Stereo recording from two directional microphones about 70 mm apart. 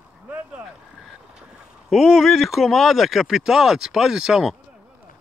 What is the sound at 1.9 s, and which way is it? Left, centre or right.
Speech, centre.